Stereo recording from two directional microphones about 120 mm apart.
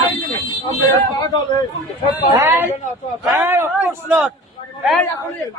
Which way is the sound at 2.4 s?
20° right (ahead or behind).